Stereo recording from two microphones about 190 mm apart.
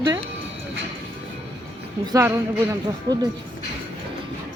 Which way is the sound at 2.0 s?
15° right (ahead or behind).